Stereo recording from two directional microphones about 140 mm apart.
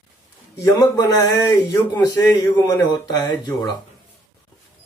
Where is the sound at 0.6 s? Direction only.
25° left (ahead or behind).